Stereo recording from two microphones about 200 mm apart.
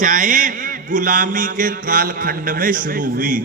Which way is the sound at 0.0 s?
40° right (ahead or behind).